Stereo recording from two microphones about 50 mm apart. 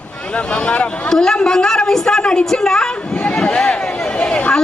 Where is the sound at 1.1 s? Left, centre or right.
Centre.